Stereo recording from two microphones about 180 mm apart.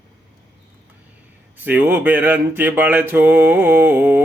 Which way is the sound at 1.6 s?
10° right (ahead or behind).